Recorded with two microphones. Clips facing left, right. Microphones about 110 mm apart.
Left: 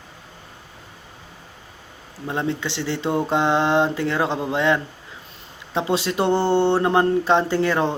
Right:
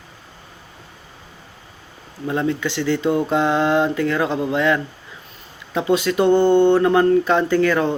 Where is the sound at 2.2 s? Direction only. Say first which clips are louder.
Right 4 dB; 25° left (ahead or behind).